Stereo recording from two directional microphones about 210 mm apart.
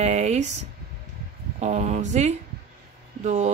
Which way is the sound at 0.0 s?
30° right (ahead or behind).